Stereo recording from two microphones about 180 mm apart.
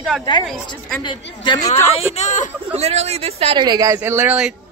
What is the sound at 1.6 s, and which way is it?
Speech, 35° left (ahead or behind).